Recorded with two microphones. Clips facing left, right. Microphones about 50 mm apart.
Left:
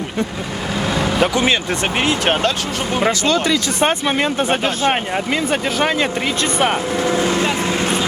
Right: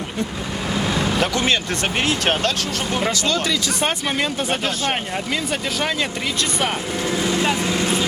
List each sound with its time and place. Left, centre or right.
1.1 s speech: centre
3.0 s speech: left